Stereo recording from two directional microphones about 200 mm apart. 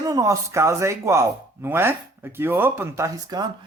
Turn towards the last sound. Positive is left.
turn(degrees=-20)  # may be behind; listen again after turning